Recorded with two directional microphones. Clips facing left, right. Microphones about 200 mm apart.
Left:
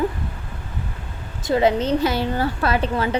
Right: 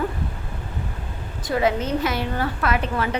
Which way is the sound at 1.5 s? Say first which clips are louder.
Left 4 dB; 25° left (ahead or behind).